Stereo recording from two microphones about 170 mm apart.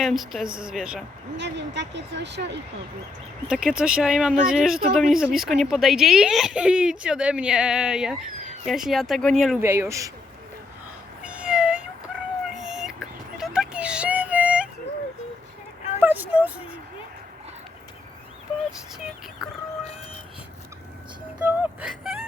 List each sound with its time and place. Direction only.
0.0 s speech: centre (ahead or behind)
1.4 s speech: 90° right
3.5 s speech: 5° right (ahead or behind)
9.6 s a man's voice: 15° right (ahead or behind)
11.2 s cat: 5° right (ahead or behind)
16.0 s a sound: 10° right (ahead or behind)
21.3 s music: 10° right (ahead or behind)